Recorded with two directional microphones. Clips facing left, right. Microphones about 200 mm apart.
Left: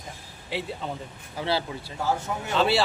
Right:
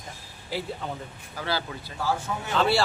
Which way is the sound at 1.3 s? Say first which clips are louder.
Left 3 dB; 25° left (ahead or behind).